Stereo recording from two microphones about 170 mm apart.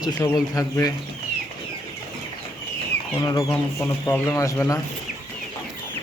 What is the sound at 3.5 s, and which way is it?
Speech, 10° left (ahead or behind).